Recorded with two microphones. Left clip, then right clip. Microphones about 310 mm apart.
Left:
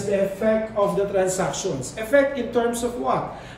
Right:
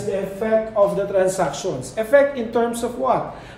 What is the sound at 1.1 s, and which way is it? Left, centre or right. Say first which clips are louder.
Speech: right 3 dB; centre.